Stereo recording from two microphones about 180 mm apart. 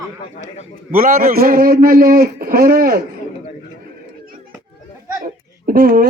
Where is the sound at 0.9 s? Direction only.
50° right (ahead or behind).